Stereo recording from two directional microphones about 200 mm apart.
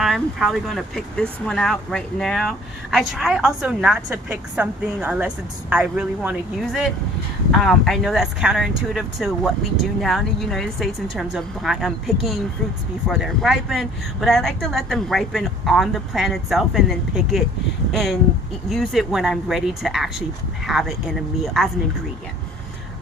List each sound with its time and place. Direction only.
0.0 s speech: centre (ahead or behind)